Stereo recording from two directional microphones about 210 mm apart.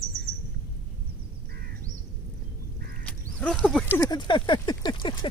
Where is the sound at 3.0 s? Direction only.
Centre (ahead or behind).